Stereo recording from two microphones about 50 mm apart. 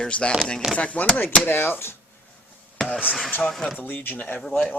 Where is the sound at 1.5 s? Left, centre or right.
Left.